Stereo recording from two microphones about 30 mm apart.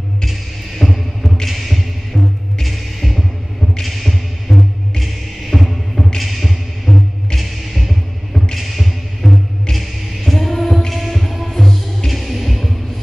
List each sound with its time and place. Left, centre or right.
0.7 s music: centre
3.8 s a sound: centre
5.5 s music: centre
6.2 s music: centre